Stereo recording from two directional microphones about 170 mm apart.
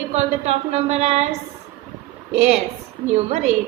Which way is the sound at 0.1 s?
40° right (ahead or behind).